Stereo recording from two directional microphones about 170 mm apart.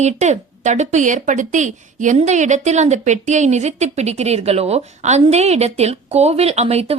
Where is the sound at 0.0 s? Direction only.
45° right (ahead or behind).